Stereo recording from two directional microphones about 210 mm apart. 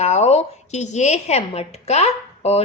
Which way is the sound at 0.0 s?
30° left (ahead or behind).